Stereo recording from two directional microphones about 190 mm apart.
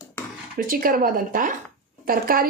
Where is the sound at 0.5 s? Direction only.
50° right (ahead or behind).